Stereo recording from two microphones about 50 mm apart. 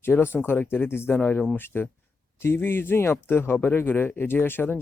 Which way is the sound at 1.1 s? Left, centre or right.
Left.